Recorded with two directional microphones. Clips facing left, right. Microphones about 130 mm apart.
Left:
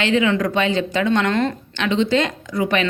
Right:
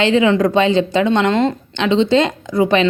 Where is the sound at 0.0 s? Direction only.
30° right (ahead or behind).